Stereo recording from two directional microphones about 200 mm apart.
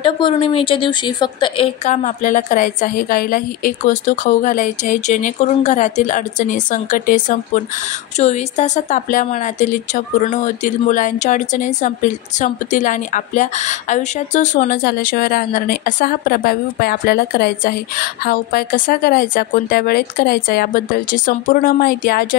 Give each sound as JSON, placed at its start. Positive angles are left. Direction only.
{"t": 0.0, "sound": "a woman's voice", "side_deg": 25}
{"t": 1.9, "sound": "a woman's voice", "side_deg": 40}